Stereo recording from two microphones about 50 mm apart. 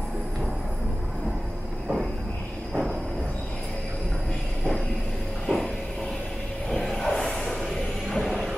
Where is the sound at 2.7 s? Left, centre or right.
Centre.